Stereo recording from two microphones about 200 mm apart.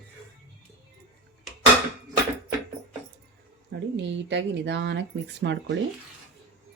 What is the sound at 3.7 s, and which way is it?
Speech, 60° right (ahead or behind).